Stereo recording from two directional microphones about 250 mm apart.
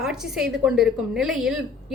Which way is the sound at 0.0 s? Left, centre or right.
Centre.